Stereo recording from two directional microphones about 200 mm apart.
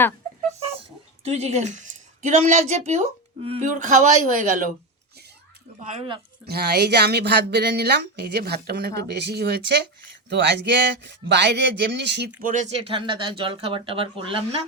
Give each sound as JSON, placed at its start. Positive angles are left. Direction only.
{"t": 1.2, "sound": "a woman's voice", "side_deg": -30}
{"t": 5.9, "sound": "a woman's voice", "side_deg": -30}
{"t": 6.4, "sound": "speech", "side_deg": -55}
{"t": 12.4, "sound": "speech", "side_deg": -40}